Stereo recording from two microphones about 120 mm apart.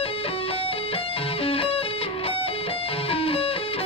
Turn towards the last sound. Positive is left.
turn(degrees=50)  # may be behind; listen again after turning